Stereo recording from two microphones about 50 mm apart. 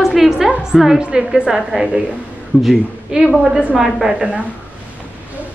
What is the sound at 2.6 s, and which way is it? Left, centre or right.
A woman's voice, centre.